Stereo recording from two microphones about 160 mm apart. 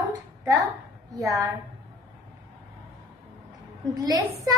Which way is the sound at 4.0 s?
25° right (ahead or behind).